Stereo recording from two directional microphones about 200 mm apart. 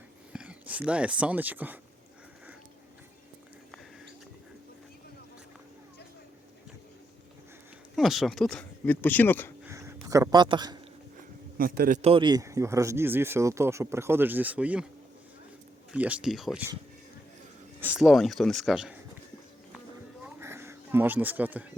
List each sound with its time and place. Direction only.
0.3 s speech: 5° right (ahead or behind)
7.9 s speech: centre (ahead or behind)
9.6 s a sound: 15° right (ahead or behind)
11.5 s a man's voice: 45° right (ahead or behind)
12.0 s speech: 25° right (ahead or behind); by 14.8 s 5° right (ahead or behind)
15.9 s speech: 5° right (ahead or behind)
17.7 s speech: 5° right (ahead or behind)
20.2 s a sound: 10° right (ahead or behind)